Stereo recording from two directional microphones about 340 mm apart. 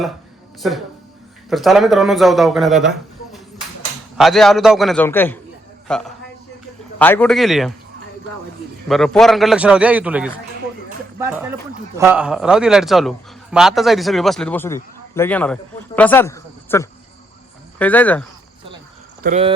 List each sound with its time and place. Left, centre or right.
0.6 s a man's voice: centre
4.2 s a man's voice: centre
8.9 s a man's voice: centre
19.2 s speech: centre